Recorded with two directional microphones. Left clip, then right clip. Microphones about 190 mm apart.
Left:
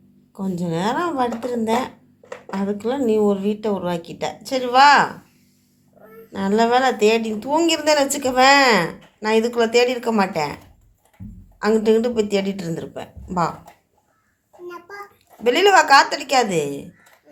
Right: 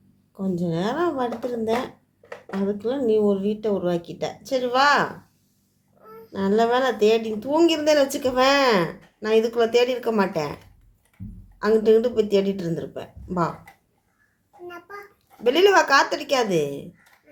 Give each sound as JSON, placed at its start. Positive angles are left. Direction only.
{"t": 0.3, "sound": "a woman's voice", "side_deg": -15}
{"t": 6.3, "sound": "a woman's voice", "side_deg": -20}
{"t": 11.6, "sound": "a woman's voice", "side_deg": -25}
{"t": 15.4, "sound": "a woman's voice", "side_deg": -25}